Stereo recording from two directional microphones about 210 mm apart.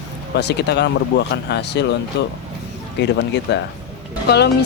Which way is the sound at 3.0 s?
55° left (ahead or behind).